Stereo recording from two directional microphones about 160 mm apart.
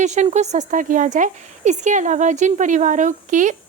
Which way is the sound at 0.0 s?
45° right (ahead or behind).